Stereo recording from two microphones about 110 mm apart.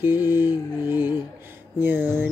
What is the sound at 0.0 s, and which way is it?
Mantra, 20° right (ahead or behind).